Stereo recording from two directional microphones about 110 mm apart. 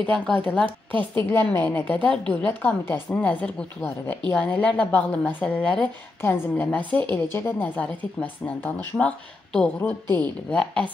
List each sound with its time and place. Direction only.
0.0 s a woman's voice: 10° left (ahead or behind)
0.7 s a woman's voice: 50° right (ahead or behind)
1.3 s a woman's voice: 20° left (ahead or behind)